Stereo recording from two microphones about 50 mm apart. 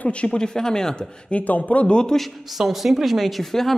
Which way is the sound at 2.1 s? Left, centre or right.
Centre.